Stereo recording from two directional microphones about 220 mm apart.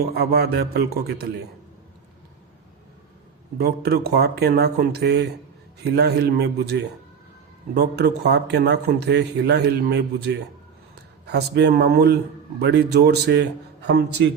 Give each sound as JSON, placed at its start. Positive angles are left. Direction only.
{"t": 0.0, "sound": "a man's voice", "side_deg": -45}
{"t": 3.6, "sound": "a man's voice", "side_deg": -45}